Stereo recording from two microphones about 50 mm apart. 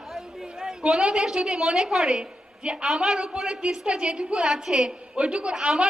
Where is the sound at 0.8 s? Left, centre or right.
Centre.